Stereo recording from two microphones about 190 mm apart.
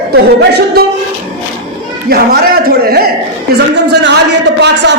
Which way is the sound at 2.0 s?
50° right (ahead or behind).